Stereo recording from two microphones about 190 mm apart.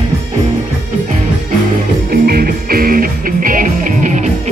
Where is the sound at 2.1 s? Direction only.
50° right (ahead or behind).